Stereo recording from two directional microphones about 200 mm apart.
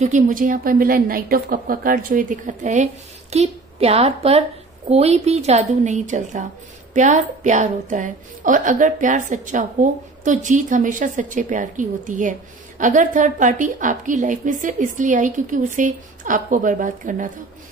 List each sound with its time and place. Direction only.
0.0 s a woman's voice: 40° right (ahead or behind)